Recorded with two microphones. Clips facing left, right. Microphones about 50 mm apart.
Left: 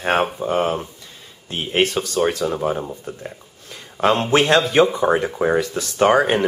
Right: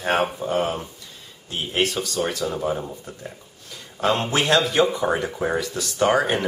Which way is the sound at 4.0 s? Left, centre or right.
Left.